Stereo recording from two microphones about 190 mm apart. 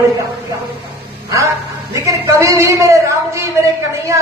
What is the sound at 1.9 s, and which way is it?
A man's voice, 15° right (ahead or behind).